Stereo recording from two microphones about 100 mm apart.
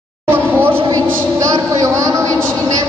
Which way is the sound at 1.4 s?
40° right (ahead or behind).